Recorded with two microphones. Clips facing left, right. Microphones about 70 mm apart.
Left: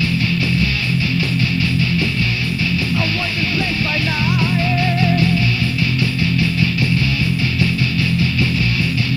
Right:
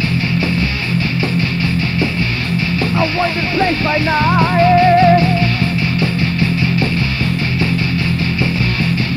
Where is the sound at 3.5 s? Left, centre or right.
Right.